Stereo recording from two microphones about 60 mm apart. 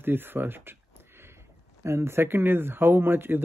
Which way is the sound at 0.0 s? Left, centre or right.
Right.